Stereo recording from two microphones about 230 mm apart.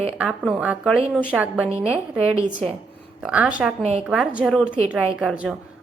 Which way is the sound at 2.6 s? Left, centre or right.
Centre.